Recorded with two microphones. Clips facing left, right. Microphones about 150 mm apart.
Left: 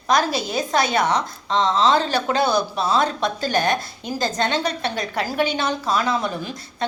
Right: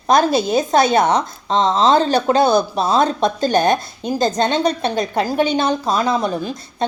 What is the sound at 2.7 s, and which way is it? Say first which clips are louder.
Speech: right 4 dB; 45° right (ahead or behind).